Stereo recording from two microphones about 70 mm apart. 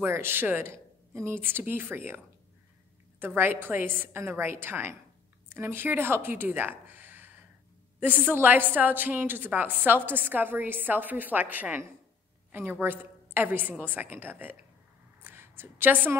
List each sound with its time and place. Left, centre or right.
0.0 s a woman's voice: right
12.8 s a woman's voice: right